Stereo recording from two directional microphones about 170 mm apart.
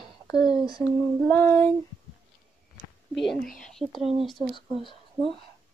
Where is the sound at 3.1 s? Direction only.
Centre (ahead or behind).